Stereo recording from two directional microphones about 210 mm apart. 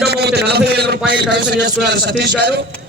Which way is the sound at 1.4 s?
50° right (ahead or behind).